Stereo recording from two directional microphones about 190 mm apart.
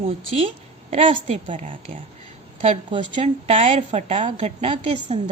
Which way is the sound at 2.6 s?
25° right (ahead or behind).